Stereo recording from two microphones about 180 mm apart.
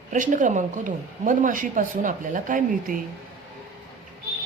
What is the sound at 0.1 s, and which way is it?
Speech, 45° right (ahead or behind).